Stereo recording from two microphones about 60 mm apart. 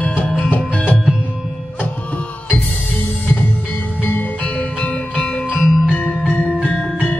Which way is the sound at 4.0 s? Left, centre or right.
Left.